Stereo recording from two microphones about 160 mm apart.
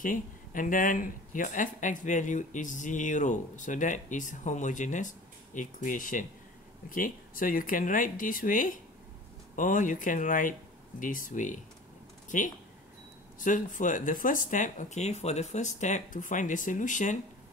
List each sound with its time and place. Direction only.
0.0 s speech: 55° left (ahead or behind)